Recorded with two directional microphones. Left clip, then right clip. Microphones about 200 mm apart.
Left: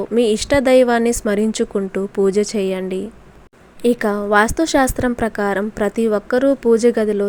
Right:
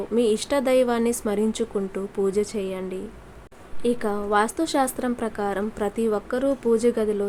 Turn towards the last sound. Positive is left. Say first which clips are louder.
# left 6 dB
turn(degrees=25)  # may be behind; listen again after turning